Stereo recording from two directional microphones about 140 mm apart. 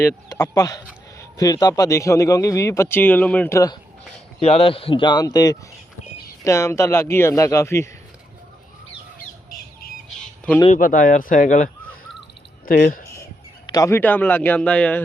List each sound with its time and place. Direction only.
0.0 s a man's voice: 25° left (ahead or behind)
4.4 s a man's voice: 45° left (ahead or behind); by 7.9 s 20° left (ahead or behind)
10.8 s speech: 75° left (ahead or behind)
13.7 s a man's voice: 25° left (ahead or behind)